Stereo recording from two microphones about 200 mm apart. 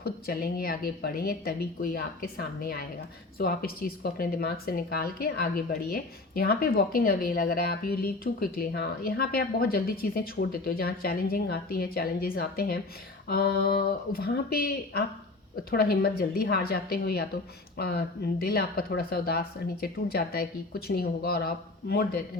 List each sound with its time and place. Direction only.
0.0 s speech: 50° left (ahead or behind)